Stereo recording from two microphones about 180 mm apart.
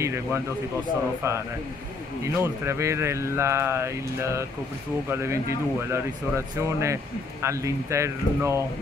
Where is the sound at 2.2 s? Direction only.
15° right (ahead or behind).